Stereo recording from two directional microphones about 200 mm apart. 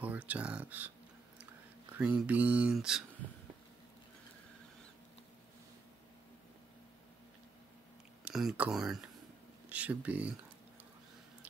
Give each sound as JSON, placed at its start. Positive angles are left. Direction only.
{"t": 0.0, "sound": "speech", "side_deg": -10}
{"t": 2.0, "sound": "mantra", "side_deg": -5}
{"t": 8.2, "sound": "speech", "side_deg": -5}